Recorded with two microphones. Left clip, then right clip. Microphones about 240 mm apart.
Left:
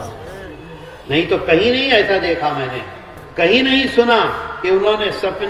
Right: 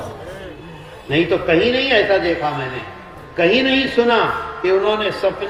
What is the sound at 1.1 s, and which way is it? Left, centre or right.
Speech, left.